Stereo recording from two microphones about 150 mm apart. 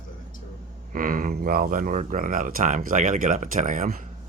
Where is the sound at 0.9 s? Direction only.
65° right (ahead or behind).